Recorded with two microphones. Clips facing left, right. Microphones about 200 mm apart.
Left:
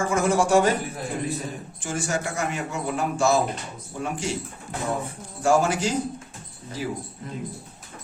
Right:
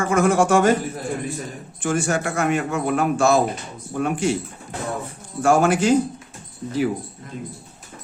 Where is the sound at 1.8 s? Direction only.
60° right (ahead or behind).